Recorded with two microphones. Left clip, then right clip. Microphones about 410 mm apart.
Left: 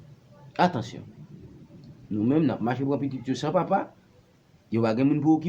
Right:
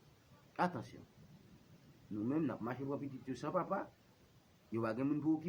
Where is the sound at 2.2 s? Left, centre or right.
Right.